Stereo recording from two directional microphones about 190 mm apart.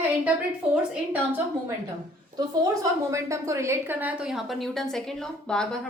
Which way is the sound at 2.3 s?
20° right (ahead or behind).